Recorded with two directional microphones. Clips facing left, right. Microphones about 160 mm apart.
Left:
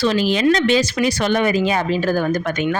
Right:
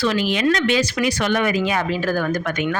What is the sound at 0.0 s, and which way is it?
Speech, 30° left (ahead or behind).